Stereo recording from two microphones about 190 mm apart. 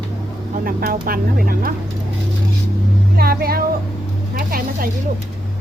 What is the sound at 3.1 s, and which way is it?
Speech, 55° right (ahead or behind).